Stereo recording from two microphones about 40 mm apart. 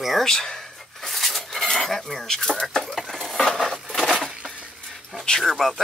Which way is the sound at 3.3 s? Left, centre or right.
Centre.